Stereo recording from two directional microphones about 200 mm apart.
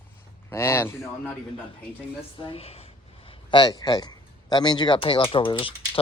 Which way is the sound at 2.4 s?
25° left (ahead or behind).